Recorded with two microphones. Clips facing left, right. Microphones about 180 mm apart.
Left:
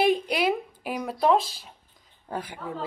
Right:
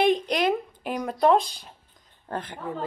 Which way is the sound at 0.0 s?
5° left (ahead or behind).